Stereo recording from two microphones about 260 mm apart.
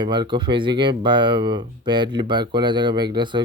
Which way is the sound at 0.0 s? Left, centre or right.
Centre.